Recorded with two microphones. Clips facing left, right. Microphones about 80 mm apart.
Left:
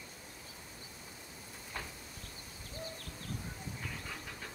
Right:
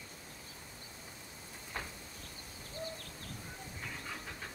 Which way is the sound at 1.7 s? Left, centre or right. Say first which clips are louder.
Right 1 dB; right.